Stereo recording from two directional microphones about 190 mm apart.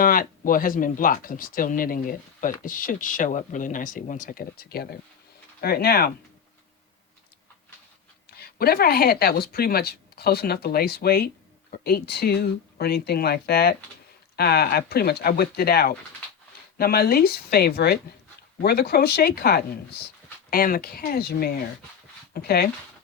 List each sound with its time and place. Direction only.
0.0 s speech: 50° left (ahead or behind)
8.3 s speech: 55° left (ahead or behind)